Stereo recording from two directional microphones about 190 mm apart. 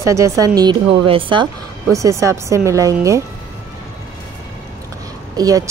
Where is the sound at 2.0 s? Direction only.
15° right (ahead or behind).